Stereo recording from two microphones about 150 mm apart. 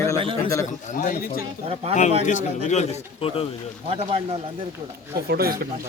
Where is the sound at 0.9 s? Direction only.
60° left (ahead or behind); by 3.4 s 40° left (ahead or behind).